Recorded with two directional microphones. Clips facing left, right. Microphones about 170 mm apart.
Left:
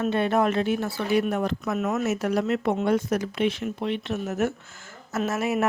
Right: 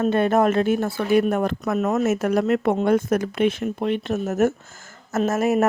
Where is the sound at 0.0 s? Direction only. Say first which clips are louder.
Right 4 dB; 45° right (ahead or behind).